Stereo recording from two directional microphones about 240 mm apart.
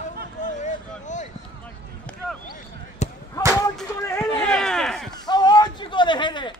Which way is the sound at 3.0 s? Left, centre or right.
Left.